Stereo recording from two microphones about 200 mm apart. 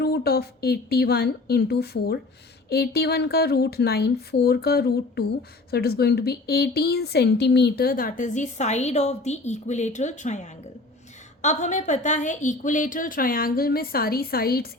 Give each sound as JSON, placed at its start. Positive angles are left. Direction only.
{"t": 0.0, "sound": "speech", "side_deg": 50}